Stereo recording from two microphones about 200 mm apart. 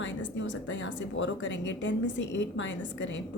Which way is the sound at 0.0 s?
65° left (ahead or behind).